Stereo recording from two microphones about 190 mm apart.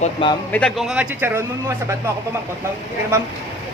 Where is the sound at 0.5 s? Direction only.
Centre (ahead or behind).